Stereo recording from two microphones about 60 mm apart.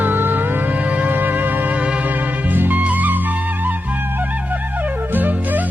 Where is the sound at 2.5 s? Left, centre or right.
Right.